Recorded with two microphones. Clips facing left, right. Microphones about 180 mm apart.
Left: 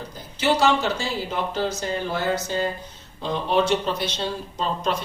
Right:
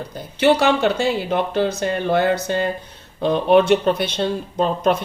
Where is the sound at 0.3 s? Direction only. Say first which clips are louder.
Right 4 dB; 60° right (ahead or behind).